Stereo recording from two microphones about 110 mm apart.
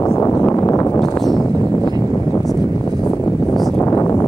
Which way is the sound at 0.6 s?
25° left (ahead or behind).